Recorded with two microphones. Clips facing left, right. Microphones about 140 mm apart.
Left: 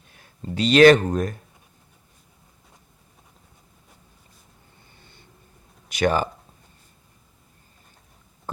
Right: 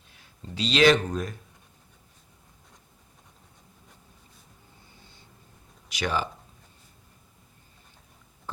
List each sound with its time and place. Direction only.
0.1 s speech: 50° left (ahead or behind)
5.9 s speech: 50° left (ahead or behind)